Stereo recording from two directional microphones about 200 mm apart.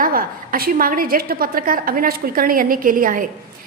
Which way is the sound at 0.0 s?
45° right (ahead or behind).